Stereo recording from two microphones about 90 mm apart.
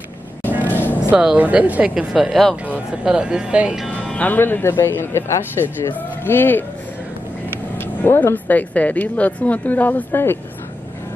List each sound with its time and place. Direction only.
0.7 s music: 20° left (ahead or behind)
1.1 s speech: 10° right (ahead or behind)
2.1 s speech: centre (ahead or behind)
2.5 s speech: 15° right (ahead or behind)
4.1 s speech: 20° left (ahead or behind)
7.7 s speech: 25° left (ahead or behind)